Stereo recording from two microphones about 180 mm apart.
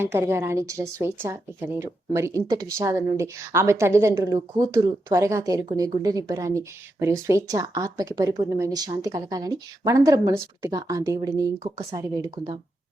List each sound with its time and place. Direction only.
0.0 s speech: 15° right (ahead or behind)